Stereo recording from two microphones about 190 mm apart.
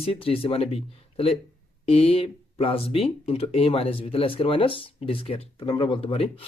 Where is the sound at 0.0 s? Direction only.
30° left (ahead or behind).